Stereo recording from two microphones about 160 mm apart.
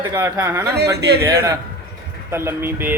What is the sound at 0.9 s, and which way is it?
Speech, 90° right.